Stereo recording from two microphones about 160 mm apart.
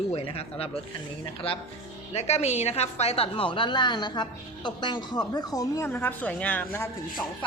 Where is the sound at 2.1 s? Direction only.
40° left (ahead or behind); by 6.8 s 10° left (ahead or behind).